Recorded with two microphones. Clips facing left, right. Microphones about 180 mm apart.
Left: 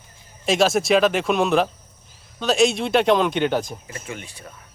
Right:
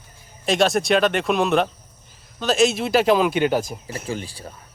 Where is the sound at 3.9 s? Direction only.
30° right (ahead or behind).